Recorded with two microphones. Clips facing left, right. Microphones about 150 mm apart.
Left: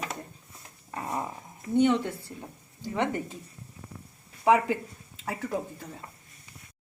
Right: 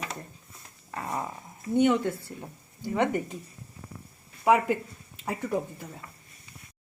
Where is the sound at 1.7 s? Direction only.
15° right (ahead or behind).